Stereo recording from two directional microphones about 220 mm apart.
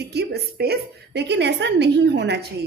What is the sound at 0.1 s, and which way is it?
A woman's voice, 50° right (ahead or behind).